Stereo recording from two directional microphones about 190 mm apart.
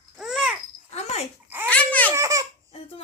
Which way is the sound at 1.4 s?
10° right (ahead or behind).